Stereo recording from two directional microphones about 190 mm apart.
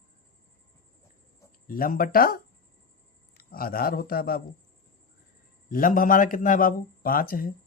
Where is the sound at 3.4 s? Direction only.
50° left (ahead or behind).